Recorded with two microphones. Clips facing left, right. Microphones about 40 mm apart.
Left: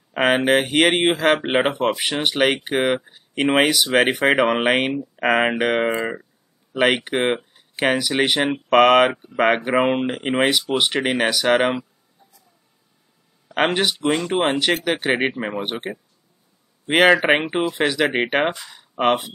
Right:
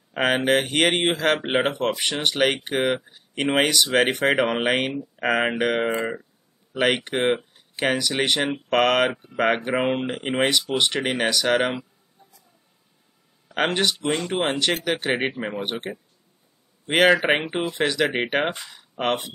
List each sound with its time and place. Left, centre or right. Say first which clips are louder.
0.1 s speech: left 3 dB; centre
5.9 s speech: left 2 dB; left
6.7 s speech: left 3 dB; centre
9.8 s speech: left 4 dB; centre
13.6 s speech: left 3 dB; centre
13.9 s speech: left 4 dB; centre